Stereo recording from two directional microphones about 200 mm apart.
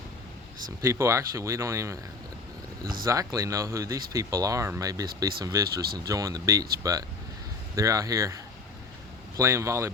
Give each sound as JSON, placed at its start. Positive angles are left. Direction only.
{"t": 0.8, "sound": "speech", "side_deg": -15}
{"t": 3.0, "sound": "speech", "side_deg": -15}
{"t": 9.4, "sound": "speech", "side_deg": -15}